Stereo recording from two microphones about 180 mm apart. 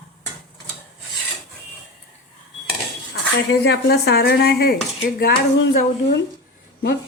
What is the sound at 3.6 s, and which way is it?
Dishes, 60° left (ahead or behind).